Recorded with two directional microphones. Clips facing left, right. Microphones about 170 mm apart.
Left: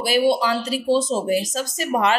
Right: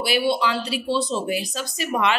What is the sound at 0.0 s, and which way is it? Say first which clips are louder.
Speech: left 3 dB; 40° left (ahead or behind).